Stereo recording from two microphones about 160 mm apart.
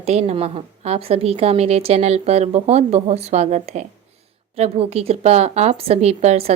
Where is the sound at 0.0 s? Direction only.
40° right (ahead or behind).